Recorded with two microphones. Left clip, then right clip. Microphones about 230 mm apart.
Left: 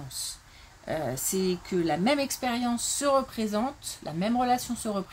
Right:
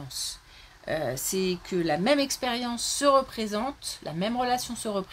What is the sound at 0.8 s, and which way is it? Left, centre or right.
Speech, right.